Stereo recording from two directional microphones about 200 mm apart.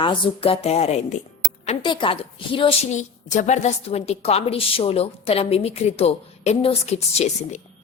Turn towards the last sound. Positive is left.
turn(degrees=35)  # may be behind; listen again after turning